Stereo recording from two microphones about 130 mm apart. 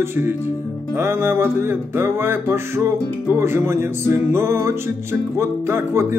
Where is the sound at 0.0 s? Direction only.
20° right (ahead or behind).